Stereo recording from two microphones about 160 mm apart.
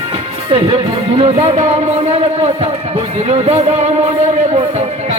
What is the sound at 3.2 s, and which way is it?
Music, 40° right (ahead or behind).